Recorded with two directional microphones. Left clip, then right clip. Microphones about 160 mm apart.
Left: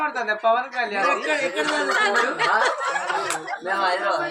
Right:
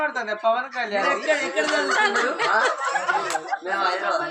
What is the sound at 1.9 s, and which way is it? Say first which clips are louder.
Speech: left 1 dB; 30° left (ahead or behind).